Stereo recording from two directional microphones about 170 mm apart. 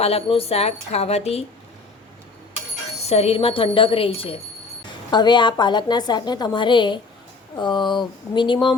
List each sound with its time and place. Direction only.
0.0 s speech: 35° left (ahead or behind)
3.0 s a woman's voice: 35° left (ahead or behind)